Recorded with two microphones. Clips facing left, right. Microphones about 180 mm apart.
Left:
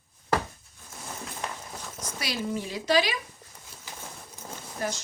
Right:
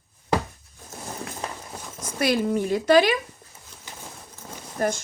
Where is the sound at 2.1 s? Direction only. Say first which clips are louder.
Right 10 dB; 55° right (ahead or behind).